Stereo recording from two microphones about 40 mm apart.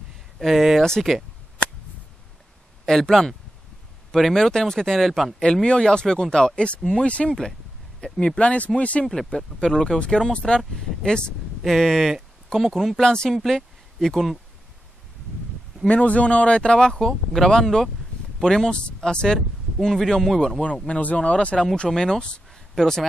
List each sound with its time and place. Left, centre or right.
0.4 s speech: centre
2.8 s speech: centre
5.4 s speech: left
7.2 s speech: centre
8.4 s speech: left
9.6 s speech: centre
11.6 s speech: centre
13.0 s speech: left
13.3 s speech: centre
15.9 s speech: left; by 20.6 s centre
21.0 s speech: left
21.8 s speech: centre